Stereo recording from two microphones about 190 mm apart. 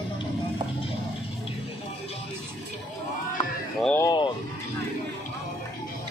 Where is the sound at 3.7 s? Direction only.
5° left (ahead or behind).